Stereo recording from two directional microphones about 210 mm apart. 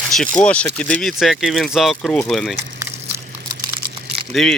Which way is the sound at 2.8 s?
10° right (ahead or behind).